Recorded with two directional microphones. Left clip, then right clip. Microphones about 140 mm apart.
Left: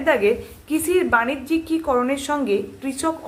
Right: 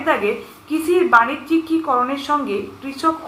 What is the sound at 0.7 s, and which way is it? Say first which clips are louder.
A woman's voice: right 4 dB; 45° left (ahead or behind).